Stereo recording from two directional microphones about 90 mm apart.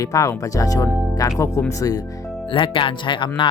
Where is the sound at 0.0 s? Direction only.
40° left (ahead or behind).